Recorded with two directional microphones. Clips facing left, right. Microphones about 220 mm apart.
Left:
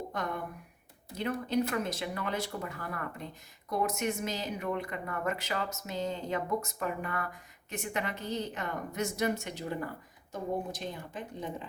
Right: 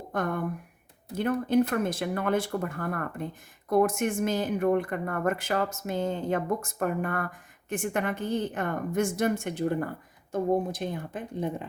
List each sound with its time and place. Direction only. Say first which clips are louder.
0.1 s speech: right 7 dB; 50° right (ahead or behind)